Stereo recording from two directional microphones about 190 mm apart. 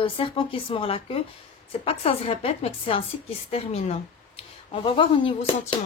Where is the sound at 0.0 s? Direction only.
25° left (ahead or behind).